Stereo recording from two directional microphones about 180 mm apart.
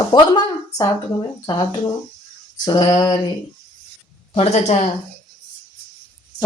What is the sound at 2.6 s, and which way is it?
Speech, 25° left (ahead or behind).